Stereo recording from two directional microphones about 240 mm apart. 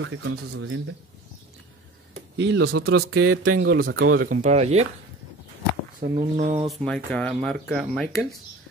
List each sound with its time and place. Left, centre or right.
0.0 s speech: right
2.3 s a man's voice: right
3.4 s speech: right
3.9 s a man's voice: right
4.2 s speech: right
5.9 s speech: right
6.7 s speech: centre